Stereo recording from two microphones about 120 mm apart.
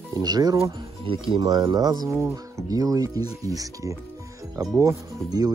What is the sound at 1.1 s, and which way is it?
Speech, 45° right (ahead or behind).